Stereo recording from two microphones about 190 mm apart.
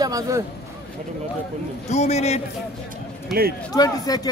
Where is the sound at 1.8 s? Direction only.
35° left (ahead or behind).